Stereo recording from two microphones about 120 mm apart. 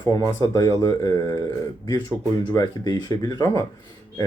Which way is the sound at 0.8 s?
25° left (ahead or behind).